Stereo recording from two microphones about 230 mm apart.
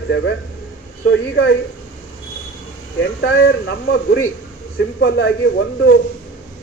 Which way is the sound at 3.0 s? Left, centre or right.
Left.